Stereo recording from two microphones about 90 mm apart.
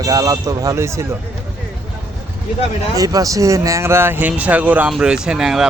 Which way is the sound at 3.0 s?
40° right (ahead or behind).